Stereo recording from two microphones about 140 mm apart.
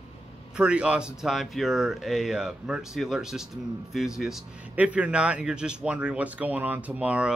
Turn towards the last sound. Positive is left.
turn(degrees=-10)  # may be behind; listen again after turning